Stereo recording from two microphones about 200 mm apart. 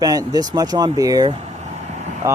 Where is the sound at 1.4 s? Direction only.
35° right (ahead or behind).